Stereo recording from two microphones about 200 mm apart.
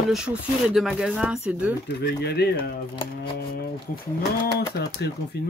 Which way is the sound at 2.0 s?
55° left (ahead or behind).